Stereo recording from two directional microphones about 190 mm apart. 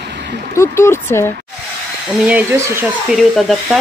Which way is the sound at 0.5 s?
15° left (ahead or behind).